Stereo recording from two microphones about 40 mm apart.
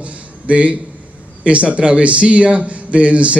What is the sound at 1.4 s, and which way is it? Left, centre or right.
A man's voice, right.